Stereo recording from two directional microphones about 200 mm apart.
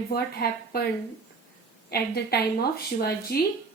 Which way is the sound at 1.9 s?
50° left (ahead or behind).